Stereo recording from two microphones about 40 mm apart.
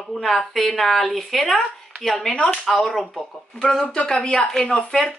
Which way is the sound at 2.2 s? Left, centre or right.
Centre.